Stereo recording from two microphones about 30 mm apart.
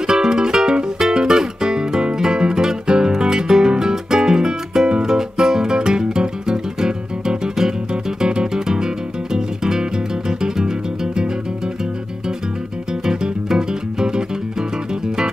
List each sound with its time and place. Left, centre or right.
0.0 s music: right
13.0 s music: right